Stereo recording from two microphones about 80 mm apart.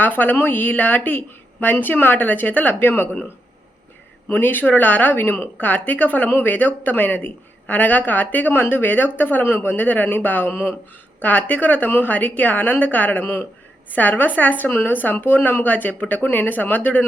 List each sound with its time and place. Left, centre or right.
0.0 s speech: left
4.3 s speech: left
11.2 s speech: centre